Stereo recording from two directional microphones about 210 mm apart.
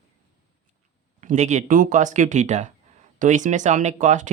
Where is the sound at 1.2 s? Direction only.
35° right (ahead or behind).